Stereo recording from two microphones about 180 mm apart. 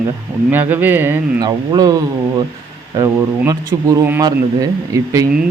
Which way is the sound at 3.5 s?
15° right (ahead or behind).